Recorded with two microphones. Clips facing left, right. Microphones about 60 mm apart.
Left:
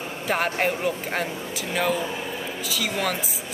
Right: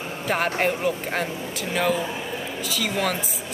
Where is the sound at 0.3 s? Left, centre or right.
Centre.